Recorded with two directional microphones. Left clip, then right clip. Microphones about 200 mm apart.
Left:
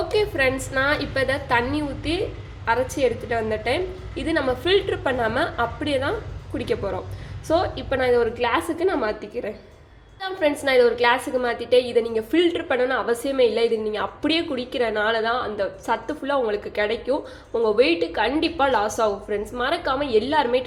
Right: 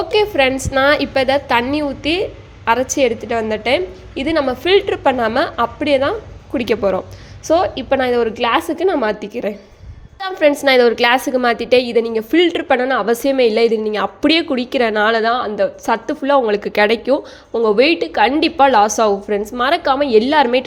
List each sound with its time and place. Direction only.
0.1 s a woman's voice: 40° right (ahead or behind)
17.5 s a woman's voice: 35° right (ahead or behind)